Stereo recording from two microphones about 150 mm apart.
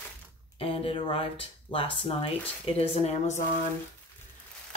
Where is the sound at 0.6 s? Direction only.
40° left (ahead or behind).